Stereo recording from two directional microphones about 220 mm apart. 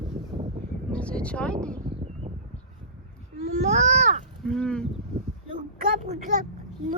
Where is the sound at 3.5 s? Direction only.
30° right (ahead or behind).